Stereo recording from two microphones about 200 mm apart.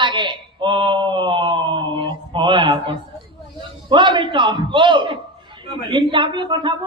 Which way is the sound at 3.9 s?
25° right (ahead or behind).